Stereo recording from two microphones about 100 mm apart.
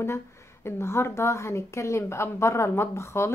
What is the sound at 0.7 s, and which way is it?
A woman's voice, 25° left (ahead or behind).